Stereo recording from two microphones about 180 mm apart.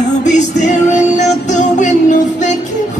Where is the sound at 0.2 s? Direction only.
45° left (ahead or behind).